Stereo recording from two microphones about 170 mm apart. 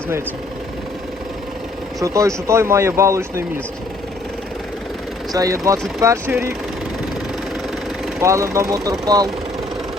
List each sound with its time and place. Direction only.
2.0 s speech: 20° right (ahead or behind)
5.3 s speech: 20° right (ahead or behind)
8.2 s speech: 15° right (ahead or behind)